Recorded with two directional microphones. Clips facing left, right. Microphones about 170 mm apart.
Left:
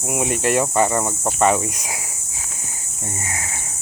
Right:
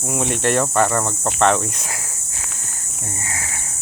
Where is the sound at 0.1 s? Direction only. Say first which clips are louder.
Even; 10° left (ahead or behind).